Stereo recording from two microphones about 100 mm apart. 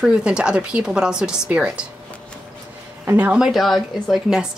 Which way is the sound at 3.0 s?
15° right (ahead or behind).